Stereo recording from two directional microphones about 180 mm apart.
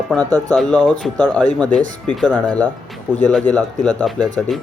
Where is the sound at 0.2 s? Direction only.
20° right (ahead or behind).